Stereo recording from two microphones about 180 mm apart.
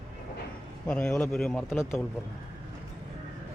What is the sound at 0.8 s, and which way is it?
Speech, 5° left (ahead or behind).